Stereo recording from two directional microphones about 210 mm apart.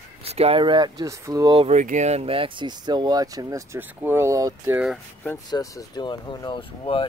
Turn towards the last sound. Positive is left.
turn(degrees=25)  # may be behind; listen again after turning